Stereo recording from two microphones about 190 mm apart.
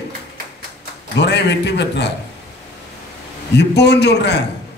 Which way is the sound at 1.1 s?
65° left (ahead or behind).